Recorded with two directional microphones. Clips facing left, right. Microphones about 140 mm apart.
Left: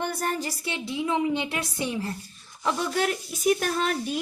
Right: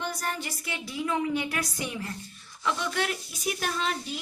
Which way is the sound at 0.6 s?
25° left (ahead or behind).